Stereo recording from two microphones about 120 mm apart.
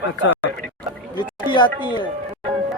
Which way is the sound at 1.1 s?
40° left (ahead or behind).